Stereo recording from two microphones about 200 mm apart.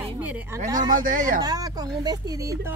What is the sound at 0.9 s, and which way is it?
Speech, 40° right (ahead or behind).